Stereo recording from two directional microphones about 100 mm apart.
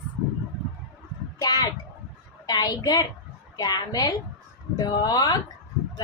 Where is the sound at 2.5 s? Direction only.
45° left (ahead or behind).